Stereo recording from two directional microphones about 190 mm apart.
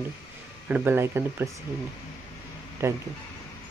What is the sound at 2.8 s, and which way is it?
Speech, 15° right (ahead or behind).